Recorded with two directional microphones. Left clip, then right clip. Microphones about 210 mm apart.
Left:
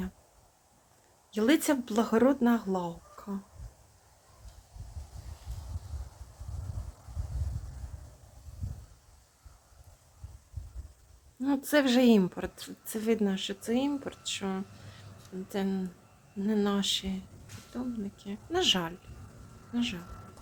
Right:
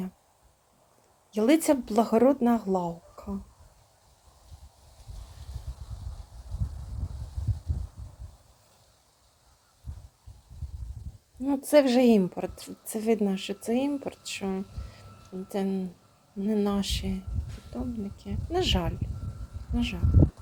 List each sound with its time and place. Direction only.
1.3 s a woman's voice: 5° right (ahead or behind)
11.4 s a woman's voice: centre (ahead or behind)